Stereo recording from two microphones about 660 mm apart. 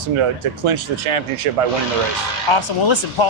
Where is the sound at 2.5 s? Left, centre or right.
Left.